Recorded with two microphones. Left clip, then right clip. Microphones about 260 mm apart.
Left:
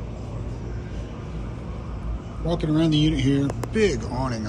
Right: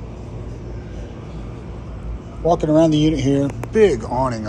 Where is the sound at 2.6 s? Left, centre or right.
Centre.